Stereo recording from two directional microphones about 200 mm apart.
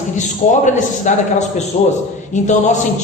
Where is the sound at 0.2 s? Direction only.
35° left (ahead or behind).